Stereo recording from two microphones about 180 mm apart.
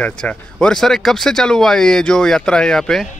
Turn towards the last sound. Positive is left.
turn(degrees=5)  # may be behind; listen again after turning